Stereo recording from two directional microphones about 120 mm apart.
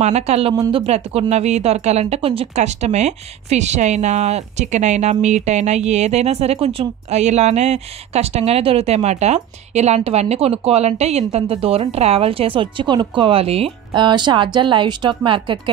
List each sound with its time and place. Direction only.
0.0 s speech: 65° right (ahead or behind)
13.9 s speech: 40° right (ahead or behind)